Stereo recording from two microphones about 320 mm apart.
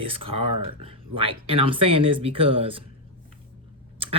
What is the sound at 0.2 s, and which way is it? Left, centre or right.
Speech, right.